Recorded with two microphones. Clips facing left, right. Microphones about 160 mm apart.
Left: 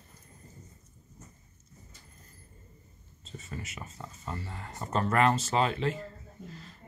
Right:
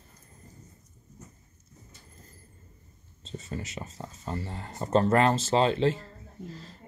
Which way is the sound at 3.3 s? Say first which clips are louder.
Right 5 dB; 30° right (ahead or behind).